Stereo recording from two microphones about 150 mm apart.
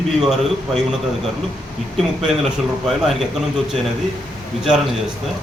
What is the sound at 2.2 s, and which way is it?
Speech, 5° right (ahead or behind).